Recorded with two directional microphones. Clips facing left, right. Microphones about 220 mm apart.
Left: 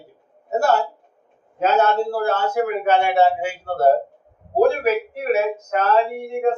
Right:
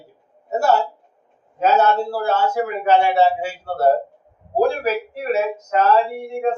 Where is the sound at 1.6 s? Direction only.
55° left (ahead or behind).